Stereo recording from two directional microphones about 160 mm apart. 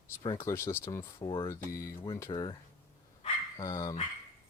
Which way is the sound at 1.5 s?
20° left (ahead or behind).